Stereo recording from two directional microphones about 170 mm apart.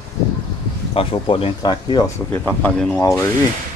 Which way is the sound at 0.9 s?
35° left (ahead or behind).